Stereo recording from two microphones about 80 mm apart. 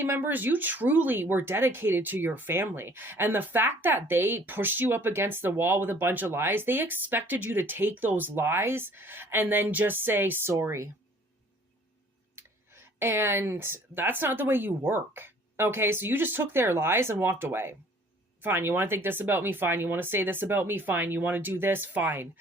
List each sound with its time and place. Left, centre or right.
0.0 s speech: right
12.4 s speech: right